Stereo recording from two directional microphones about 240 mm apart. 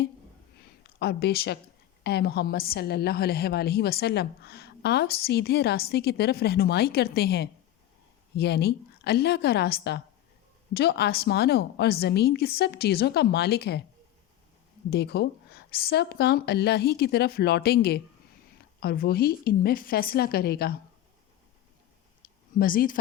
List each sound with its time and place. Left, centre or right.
0.6 s a sound: left
2.0 s a woman's voice: left
14.8 s a woman's voice: left
22.5 s a woman's voice: left